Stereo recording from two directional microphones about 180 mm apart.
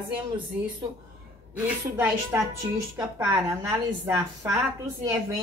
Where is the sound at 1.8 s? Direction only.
15° right (ahead or behind).